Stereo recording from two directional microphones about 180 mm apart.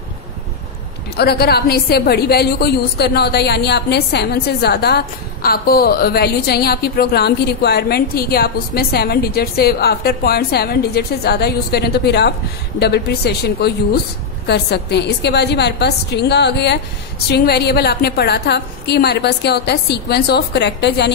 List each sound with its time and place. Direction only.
1.1 s a woman's voice: 60° left (ahead or behind)